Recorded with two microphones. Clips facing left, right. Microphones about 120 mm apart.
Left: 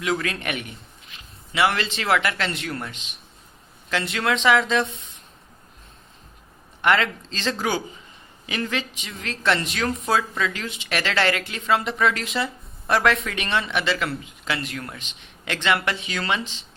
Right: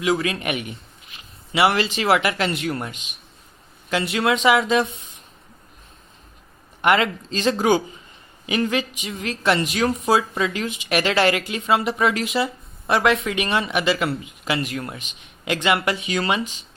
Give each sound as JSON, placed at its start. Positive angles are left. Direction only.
{"t": 0.0, "sound": "speech", "side_deg": -5}
{"t": 6.8, "sound": "speech", "side_deg": -15}